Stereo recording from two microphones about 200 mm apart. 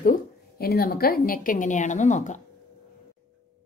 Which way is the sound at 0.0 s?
45° left (ahead or behind).